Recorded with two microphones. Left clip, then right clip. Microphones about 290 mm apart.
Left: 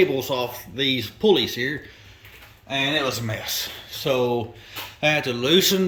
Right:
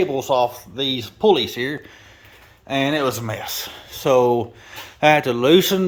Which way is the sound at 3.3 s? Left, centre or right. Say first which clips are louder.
Even; centre.